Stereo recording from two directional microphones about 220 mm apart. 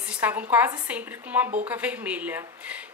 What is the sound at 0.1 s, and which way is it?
A woman's voice, 5° right (ahead or behind).